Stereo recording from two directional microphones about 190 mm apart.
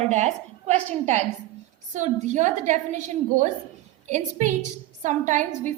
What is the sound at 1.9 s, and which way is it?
A woman's voice, 40° right (ahead or behind).